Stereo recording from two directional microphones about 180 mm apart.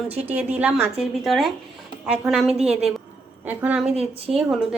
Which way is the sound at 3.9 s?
35° right (ahead or behind).